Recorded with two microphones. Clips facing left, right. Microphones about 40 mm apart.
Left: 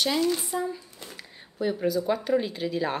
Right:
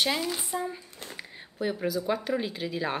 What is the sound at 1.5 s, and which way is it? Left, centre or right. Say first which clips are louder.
Speech: left 3 dB; centre.